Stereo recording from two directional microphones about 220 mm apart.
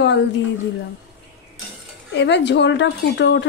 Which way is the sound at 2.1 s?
50° left (ahead or behind).